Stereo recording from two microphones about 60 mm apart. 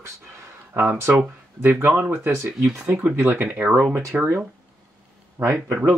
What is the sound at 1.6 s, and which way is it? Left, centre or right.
Speech, right.